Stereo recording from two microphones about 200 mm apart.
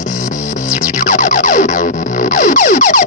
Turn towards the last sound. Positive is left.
turn(degrees=40)  # may be behind; listen again after turning